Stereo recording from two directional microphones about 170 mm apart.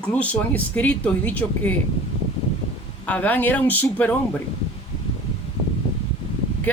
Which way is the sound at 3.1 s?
10° left (ahead or behind).